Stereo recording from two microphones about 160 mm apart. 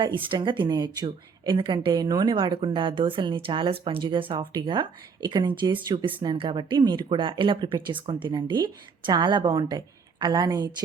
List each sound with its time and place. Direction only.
0.0 s a woman's voice: 30° right (ahead or behind)